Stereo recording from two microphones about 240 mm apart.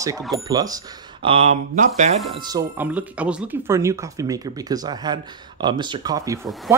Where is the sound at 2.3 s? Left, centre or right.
Centre.